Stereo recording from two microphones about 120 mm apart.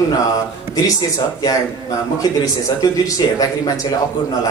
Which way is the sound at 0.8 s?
30° left (ahead or behind).